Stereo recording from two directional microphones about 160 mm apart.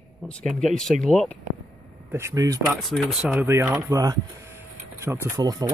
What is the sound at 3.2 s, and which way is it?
Speech, 15° right (ahead or behind).